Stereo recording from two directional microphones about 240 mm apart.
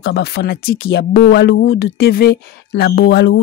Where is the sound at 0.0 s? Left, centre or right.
Left.